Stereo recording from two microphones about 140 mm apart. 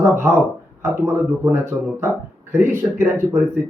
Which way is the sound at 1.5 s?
20° right (ahead or behind).